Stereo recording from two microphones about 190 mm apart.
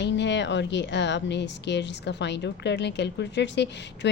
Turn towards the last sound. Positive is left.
turn(degrees=65)  # may be behind; listen again after turning